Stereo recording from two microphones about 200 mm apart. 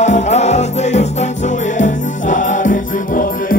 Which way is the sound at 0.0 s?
35° left (ahead or behind).